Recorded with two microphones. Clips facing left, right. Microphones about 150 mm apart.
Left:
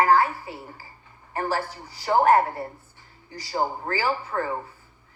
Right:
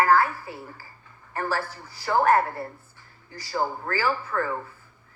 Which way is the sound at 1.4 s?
15° left (ahead or behind).